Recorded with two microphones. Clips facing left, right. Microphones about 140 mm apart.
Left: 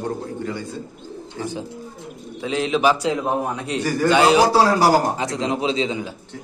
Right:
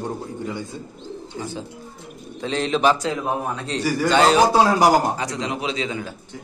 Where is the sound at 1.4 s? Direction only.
15° left (ahead or behind).